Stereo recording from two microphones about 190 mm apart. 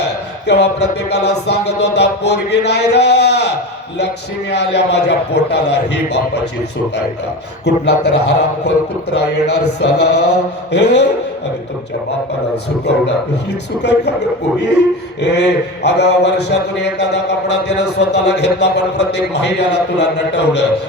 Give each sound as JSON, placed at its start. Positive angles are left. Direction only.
{"t": 0.4, "sound": "a man's voice", "side_deg": 60}
{"t": 4.5, "sound": "a man's voice", "side_deg": 60}
{"t": 7.6, "sound": "a man's voice", "side_deg": 60}
{"t": 13.8, "sound": "a man's voice", "side_deg": 60}